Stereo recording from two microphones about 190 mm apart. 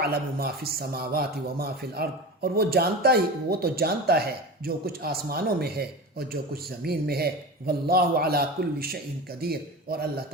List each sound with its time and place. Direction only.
0.0 s a man's voice: 55° right (ahead or behind)